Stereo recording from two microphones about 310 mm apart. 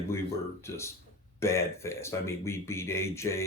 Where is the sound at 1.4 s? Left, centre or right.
Centre.